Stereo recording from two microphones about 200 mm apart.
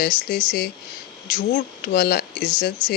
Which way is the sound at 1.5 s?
55° left (ahead or behind).